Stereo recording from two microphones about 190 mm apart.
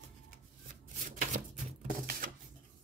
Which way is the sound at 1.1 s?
40° right (ahead or behind).